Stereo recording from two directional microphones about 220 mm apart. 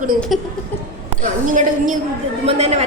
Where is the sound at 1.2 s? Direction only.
35° right (ahead or behind).